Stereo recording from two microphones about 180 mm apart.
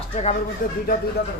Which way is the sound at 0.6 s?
50° left (ahead or behind).